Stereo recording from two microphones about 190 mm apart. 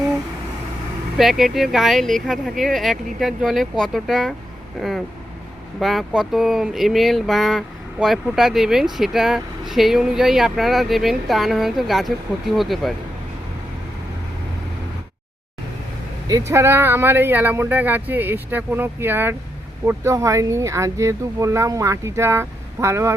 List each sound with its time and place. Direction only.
1.2 s speech: centre (ahead or behind)
16.5 s speech: 15° right (ahead or behind)